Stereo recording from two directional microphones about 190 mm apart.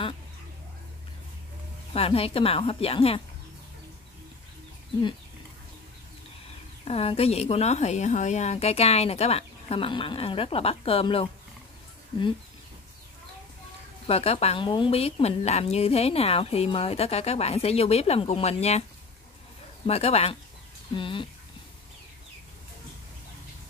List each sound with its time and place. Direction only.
2.0 s speech: 30° left (ahead or behind)
6.8 s speech: 30° left (ahead or behind)
14.0 s speech: 30° left (ahead or behind)
19.9 s speech: 35° left (ahead or behind)